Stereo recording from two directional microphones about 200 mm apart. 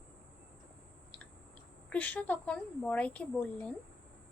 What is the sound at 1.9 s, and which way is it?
A woman's voice, 5° left (ahead or behind).